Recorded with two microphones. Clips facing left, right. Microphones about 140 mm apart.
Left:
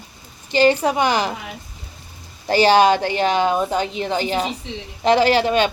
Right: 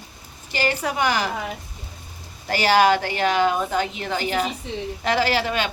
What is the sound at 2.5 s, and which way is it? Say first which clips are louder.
A woman's voice: left 4 dB; 25° left (ahead or behind).